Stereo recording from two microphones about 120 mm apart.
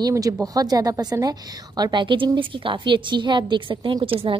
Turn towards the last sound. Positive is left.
turn(degrees=-50)  # may be behind; listen again after turning